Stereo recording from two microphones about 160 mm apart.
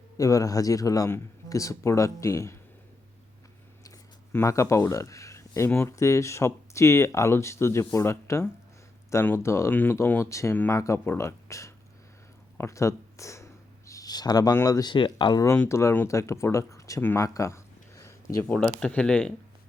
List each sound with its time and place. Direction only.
0.2 s speech: 20° left (ahead or behind)
3.8 s speech: 15° left (ahead or behind)
18.4 s speech: 10° left (ahead or behind)